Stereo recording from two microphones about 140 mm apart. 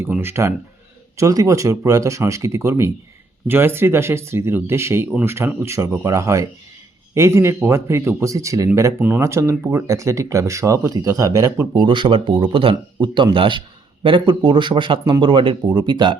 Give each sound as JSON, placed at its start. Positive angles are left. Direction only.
{"t": 0.0, "sound": "speech", "side_deg": -15}